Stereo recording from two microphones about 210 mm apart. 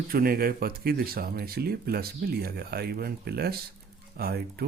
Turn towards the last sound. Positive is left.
turn(degrees=-50)  # may be behind; listen again after turning